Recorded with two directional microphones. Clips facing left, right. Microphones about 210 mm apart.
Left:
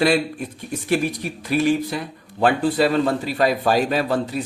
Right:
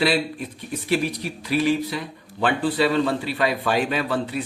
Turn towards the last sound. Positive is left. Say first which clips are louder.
# left 3 dB
turn(degrees=40)  # may be behind; listen again after turning